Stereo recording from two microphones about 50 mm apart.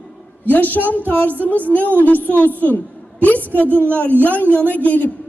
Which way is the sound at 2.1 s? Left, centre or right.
Right.